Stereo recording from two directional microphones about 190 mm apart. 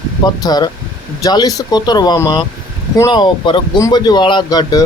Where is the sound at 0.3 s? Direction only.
20° left (ahead or behind).